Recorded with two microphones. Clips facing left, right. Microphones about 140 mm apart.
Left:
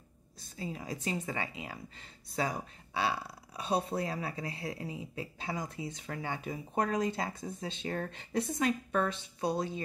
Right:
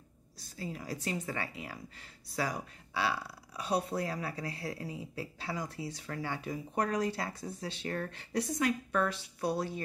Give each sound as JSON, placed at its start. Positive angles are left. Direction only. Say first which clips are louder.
{"t": 0.6, "sound": "speech", "louder": "even", "side_deg": 20}